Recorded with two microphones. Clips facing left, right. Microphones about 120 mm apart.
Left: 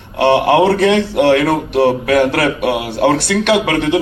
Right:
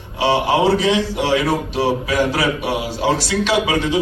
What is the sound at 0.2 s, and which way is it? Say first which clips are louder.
Speech: left 5 dB; 60° left (ahead or behind).